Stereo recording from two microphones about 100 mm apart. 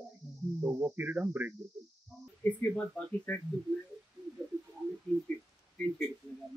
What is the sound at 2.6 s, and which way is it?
Speech, 15° left (ahead or behind).